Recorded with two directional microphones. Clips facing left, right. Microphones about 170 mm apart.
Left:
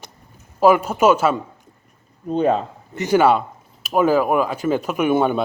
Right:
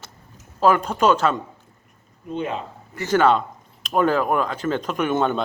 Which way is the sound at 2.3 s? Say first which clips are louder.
Left 9 dB; 40° left (ahead or behind).